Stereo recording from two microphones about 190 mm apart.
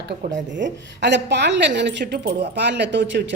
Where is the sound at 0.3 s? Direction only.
70° right (ahead or behind).